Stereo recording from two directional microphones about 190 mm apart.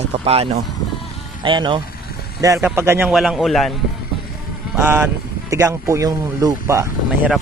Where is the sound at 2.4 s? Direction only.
15° right (ahead or behind).